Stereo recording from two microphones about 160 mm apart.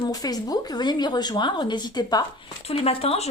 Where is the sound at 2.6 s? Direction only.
40° left (ahead or behind).